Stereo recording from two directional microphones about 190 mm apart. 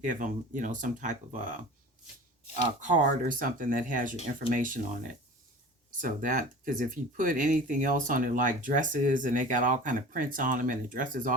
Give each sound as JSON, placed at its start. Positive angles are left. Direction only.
{"t": 0.0, "sound": "speech", "side_deg": -45}
{"t": 2.8, "sound": "speech", "side_deg": -45}